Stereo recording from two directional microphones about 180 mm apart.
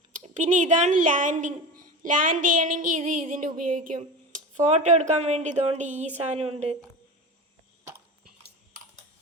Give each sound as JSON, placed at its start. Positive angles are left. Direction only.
{"t": 0.1, "sound": "a woman's voice", "side_deg": -45}